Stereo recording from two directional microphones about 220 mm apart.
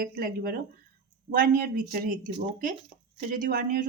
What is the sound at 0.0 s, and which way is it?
Speech, 40° right (ahead or behind).